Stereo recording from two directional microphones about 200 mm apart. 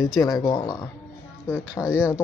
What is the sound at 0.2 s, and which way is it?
Speech, 20° left (ahead or behind).